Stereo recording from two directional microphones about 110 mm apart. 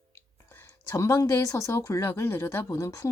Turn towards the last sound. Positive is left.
turn(degrees=30)  # may be behind; listen again after turning